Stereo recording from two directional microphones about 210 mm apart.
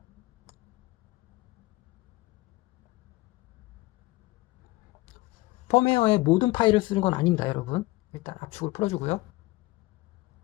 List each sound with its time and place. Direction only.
5.6 s speech: 30° left (ahead or behind)